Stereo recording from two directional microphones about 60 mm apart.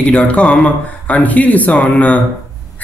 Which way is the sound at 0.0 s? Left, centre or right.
Left.